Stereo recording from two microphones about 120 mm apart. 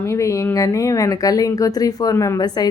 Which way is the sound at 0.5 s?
30° left (ahead or behind).